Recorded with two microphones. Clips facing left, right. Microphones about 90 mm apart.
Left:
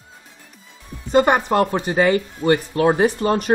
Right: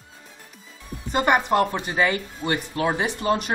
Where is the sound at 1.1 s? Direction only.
30° left (ahead or behind).